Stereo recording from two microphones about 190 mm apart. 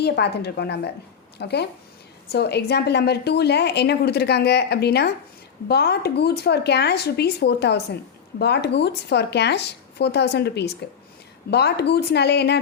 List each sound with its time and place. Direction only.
0.0 s a woman's voice: 60° left (ahead or behind)